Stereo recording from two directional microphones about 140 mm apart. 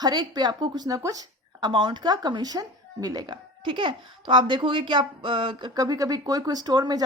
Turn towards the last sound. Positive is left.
turn(degrees=-30)  # may be behind; listen again after turning